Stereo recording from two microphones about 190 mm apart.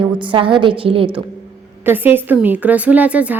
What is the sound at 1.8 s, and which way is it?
A woman's voice, 10° right (ahead or behind).